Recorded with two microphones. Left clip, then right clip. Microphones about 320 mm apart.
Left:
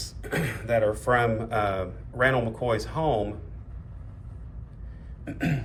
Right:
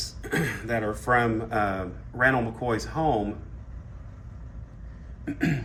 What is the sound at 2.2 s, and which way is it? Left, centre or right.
Speech, left.